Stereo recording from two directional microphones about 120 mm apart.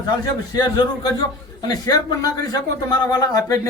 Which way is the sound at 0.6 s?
35° left (ahead or behind).